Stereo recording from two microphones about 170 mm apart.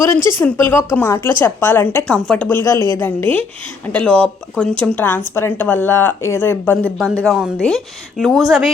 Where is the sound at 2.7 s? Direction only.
20° left (ahead or behind).